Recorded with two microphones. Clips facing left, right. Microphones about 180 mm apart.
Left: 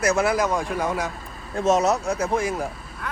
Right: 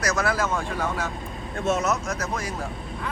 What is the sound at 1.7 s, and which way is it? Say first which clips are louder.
Speech: left 5 dB; 35° left (ahead or behind).